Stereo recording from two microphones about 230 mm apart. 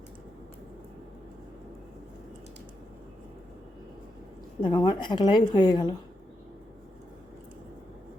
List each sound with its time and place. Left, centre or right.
4.6 s a woman's voice: centre